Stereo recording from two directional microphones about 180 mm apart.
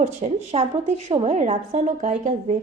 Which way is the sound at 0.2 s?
35° right (ahead or behind).